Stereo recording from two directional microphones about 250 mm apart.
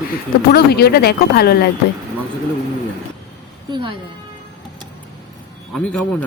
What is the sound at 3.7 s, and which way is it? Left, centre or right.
Speech, centre.